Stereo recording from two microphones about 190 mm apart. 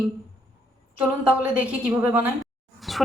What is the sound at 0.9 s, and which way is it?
A woman's voice, 10° right (ahead or behind).